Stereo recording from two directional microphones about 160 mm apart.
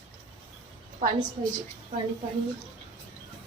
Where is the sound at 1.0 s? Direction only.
55° right (ahead or behind).